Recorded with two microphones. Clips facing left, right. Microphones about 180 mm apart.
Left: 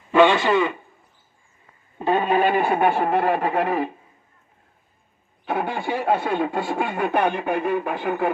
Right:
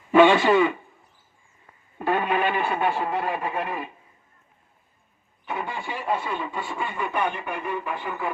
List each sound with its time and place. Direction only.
0.1 s a man's voice: 10° right (ahead or behind)
2.0 s speech: 25° left (ahead or behind); by 3.8 s 70° left (ahead or behind)
5.5 s a sound: 75° left (ahead or behind)